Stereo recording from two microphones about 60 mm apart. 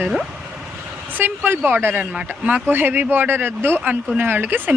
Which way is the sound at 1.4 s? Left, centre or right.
Right.